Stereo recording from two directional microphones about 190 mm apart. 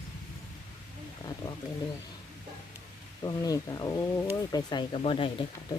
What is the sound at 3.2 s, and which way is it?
Speech, 20° left (ahead or behind).